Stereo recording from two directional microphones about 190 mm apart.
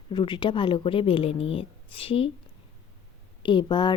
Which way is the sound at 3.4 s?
25° left (ahead or behind).